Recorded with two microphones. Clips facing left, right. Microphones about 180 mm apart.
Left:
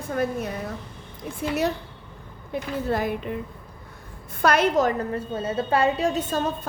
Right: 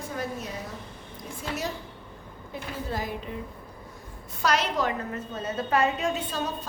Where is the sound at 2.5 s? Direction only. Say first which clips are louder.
Left 8 dB; 60° left (ahead or behind).